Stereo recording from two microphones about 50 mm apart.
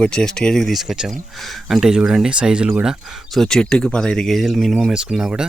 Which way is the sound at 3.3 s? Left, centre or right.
Centre.